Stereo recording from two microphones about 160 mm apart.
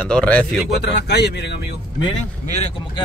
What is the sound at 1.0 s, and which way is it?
Speech, 90° left.